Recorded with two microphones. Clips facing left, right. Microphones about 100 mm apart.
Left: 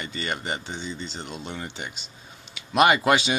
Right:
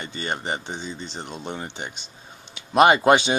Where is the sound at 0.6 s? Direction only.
40° right (ahead or behind).